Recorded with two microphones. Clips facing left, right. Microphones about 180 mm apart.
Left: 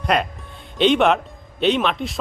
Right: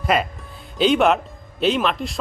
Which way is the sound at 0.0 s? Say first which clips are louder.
Even; 5° right (ahead or behind).